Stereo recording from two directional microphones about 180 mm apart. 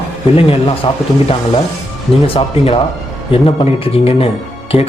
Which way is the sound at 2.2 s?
30° left (ahead or behind).